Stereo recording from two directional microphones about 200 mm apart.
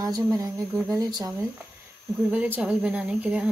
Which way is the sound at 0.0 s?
15° right (ahead or behind).